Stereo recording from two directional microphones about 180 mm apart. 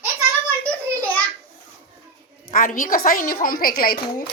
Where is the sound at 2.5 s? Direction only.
50° left (ahead or behind).